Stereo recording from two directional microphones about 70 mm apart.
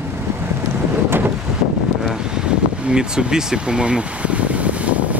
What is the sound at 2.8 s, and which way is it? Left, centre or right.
Vehicle, centre.